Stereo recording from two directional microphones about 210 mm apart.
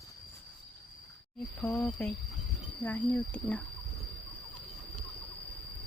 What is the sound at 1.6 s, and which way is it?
Speech, 5° left (ahead or behind).